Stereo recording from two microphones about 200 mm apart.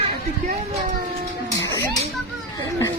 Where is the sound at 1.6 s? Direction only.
15° left (ahead or behind).